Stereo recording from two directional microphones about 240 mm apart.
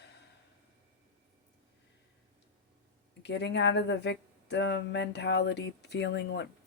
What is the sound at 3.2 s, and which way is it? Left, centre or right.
Speech, left.